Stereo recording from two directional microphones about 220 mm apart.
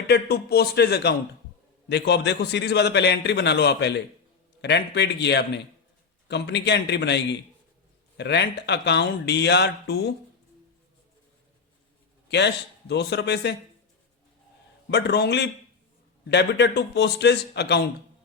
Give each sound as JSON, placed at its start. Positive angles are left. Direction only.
{"t": 0.1, "sound": "a man's voice", "side_deg": 45}
{"t": 12.3, "sound": "a man's voice", "side_deg": 50}
{"t": 14.8, "sound": "a man's voice", "side_deg": 50}